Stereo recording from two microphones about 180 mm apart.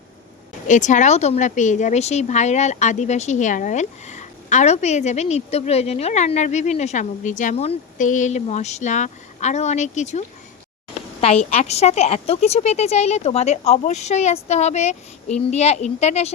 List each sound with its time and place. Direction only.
0.7 s speech: 40° left (ahead or behind)
11.5 s speech: 35° left (ahead or behind)